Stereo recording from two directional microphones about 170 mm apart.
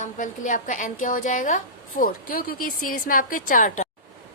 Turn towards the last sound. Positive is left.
turn(degrees=50)  # may be behind; listen again after turning